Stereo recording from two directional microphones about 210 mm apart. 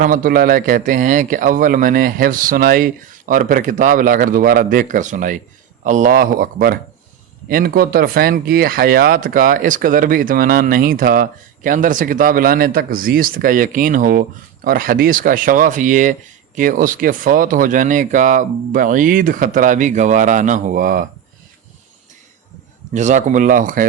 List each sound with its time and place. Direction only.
0.0 s speech: 40° right (ahead or behind)
22.9 s speech: 35° right (ahead or behind)